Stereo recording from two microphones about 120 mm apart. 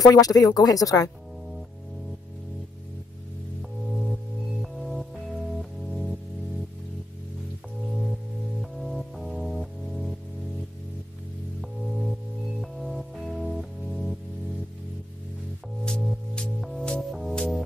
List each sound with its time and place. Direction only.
0.0 s speech: 30° left (ahead or behind)
3.9 s singing bowl: centre (ahead or behind)
5.6 s music: centre (ahead or behind)
7.9 s music: centre (ahead or behind)
11.9 s music: centre (ahead or behind)
15.8 s music: 5° left (ahead or behind)